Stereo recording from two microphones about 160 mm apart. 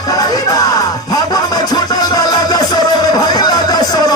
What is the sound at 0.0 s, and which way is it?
Music, 20° left (ahead or behind).